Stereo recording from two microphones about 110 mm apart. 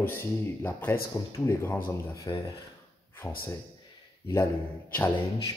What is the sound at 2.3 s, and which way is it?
Speech, 35° left (ahead or behind).